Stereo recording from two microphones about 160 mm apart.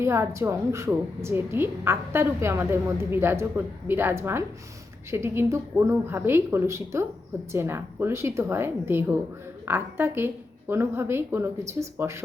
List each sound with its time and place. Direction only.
0.0 s a woman's voice: 15° right (ahead or behind)